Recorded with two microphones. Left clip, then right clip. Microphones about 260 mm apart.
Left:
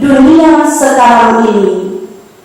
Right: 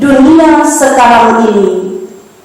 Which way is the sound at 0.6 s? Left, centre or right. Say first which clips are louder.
Right 1 dB; centre.